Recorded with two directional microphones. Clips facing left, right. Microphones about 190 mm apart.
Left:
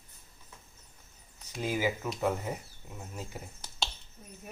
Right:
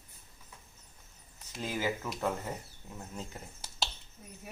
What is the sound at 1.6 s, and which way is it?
Speech, 10° left (ahead or behind).